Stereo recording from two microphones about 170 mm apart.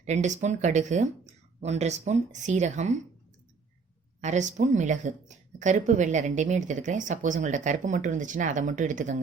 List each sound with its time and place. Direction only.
0.0 s speech: 40° right (ahead or behind)
4.2 s speech: 45° right (ahead or behind)